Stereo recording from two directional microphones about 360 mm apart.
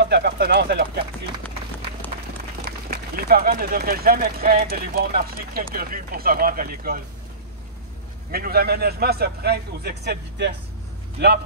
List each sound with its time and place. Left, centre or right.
0.0 s speech: right
2.9 s speech: right
8.3 s speech: right